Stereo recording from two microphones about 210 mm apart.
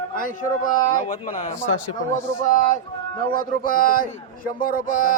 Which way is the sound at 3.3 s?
40° left (ahead or behind).